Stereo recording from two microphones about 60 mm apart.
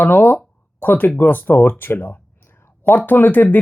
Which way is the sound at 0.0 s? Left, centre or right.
Left.